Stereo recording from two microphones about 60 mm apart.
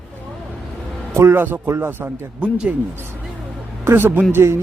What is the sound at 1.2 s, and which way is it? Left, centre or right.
A man's voice, right.